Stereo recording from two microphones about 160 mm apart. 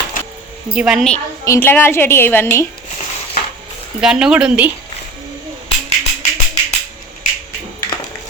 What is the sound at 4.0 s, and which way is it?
Speech, 5° right (ahead or behind).